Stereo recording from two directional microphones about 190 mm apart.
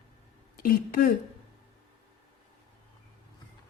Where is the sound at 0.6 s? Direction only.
50° left (ahead or behind).